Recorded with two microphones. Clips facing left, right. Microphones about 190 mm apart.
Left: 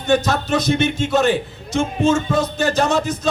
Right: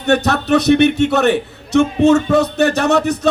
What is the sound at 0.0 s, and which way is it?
A man's voice, 65° right (ahead or behind).